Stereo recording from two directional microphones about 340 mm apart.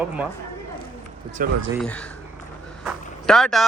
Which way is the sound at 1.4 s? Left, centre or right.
Right.